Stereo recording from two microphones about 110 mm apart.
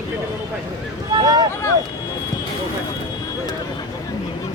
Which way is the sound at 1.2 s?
40° right (ahead or behind).